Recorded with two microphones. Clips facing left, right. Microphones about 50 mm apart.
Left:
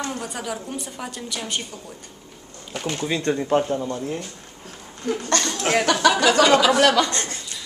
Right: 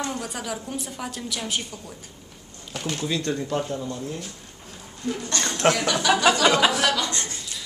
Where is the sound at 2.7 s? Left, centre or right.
Centre; by 4.2 s left.